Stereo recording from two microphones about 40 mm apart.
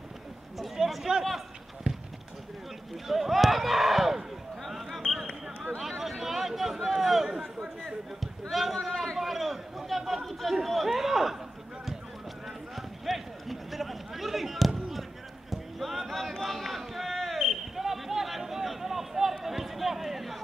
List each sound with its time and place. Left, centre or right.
0.6 s a sound: centre
1.9 s clip-clop: right
3.1 s a man's voice: centre
4.6 s basketball bounce: centre
5.8 s a sound: centre
7.8 s a man's voice: centre
8.7 s a man's voice: centre
12.7 s run: centre
15.5 s a sound: centre